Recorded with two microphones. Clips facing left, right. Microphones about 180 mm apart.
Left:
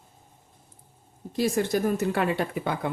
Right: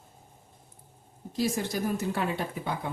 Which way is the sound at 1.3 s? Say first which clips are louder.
Left 5 dB; 60° left (ahead or behind).